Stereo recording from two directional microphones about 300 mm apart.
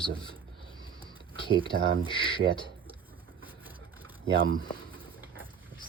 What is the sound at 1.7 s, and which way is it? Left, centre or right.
Speech, right.